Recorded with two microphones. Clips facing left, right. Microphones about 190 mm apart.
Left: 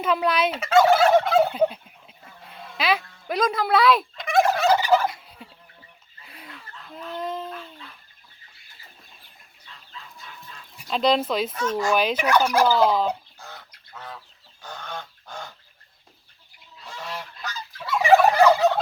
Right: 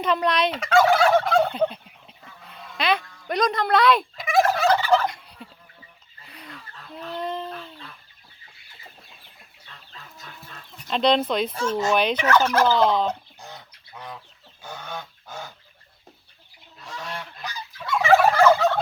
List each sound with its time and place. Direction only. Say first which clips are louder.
0.0 s fowl: even; 5° left (ahead or behind)
6.9 s a sound: right 1 dB; centre (ahead or behind)
9.6 s chicken: left 2 dB; 45° right (ahead or behind)
10.8 s speech: right 1 dB; 5° left (ahead or behind)
11.5 s speech: right 1 dB; 30° right (ahead or behind)
11.9 s fowl: even; 5° left (ahead or behind)
13.9 s chicken: right 1 dB; 15° right (ahead or behind)
14.6 s goose: right 1 dB; 10° right (ahead or behind)
16.8 s goose: even; centre (ahead or behind)
17.4 s fowl: even; 10° right (ahead or behind)
18.3 s fowl: even; 15° left (ahead or behind)